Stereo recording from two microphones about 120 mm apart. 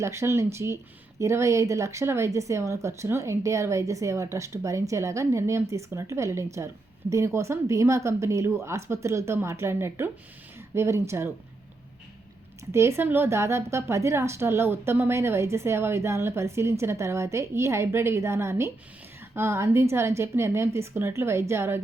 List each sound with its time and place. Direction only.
0.0 s a woman's voice: 25° right (ahead or behind)
12.7 s a woman's voice: 20° right (ahead or behind)